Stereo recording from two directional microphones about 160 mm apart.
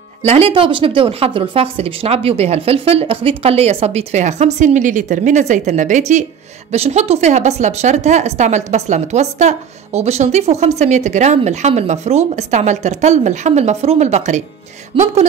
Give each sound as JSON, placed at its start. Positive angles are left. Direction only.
{"t": 0.2, "sound": "a woman's voice", "side_deg": -40}
{"t": 14.9, "sound": "speech", "side_deg": -35}